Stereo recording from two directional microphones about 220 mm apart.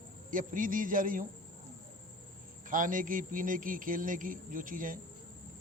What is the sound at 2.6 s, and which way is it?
Speech, 35° right (ahead or behind).